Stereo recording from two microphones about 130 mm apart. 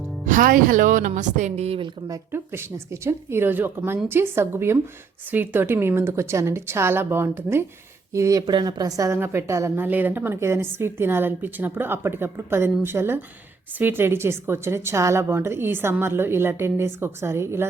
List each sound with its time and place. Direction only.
0.3 s a woman's voice: 90° right; by 1.9 s 50° right (ahead or behind)
2.0 s a woman's voice: 20° right (ahead or behind)